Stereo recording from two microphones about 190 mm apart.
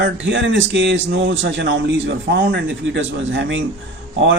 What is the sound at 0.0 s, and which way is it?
A man's voice, 80° right.